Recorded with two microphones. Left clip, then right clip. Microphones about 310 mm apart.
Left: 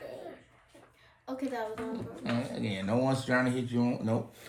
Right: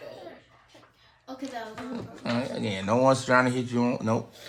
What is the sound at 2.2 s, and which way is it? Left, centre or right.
Speech, right.